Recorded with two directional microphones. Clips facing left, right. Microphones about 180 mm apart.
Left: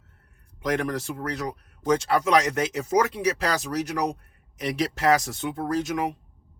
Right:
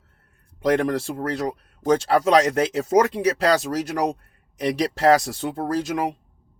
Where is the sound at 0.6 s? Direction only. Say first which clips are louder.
Right 6 dB; 35° right (ahead or behind).